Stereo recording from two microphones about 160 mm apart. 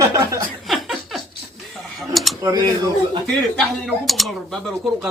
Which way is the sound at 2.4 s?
25° right (ahead or behind).